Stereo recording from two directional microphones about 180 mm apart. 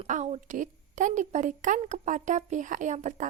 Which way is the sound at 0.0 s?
40° right (ahead or behind).